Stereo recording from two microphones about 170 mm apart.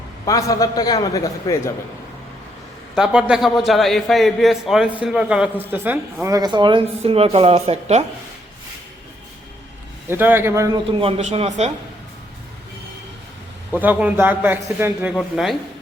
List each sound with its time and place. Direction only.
0.3 s a man's voice: 20° left (ahead or behind)
2.9 s a man's voice: 5° right (ahead or behind); by 8.0 s 40° right (ahead or behind)
10.1 s a man's voice: 10° right (ahead or behind)
11.0 s a man's voice: 40° right (ahead or behind)
13.8 s a man's voice: 10° right (ahead or behind)